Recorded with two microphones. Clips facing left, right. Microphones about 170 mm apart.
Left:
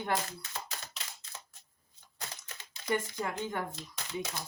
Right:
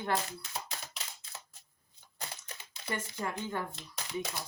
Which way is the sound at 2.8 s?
15° left (ahead or behind).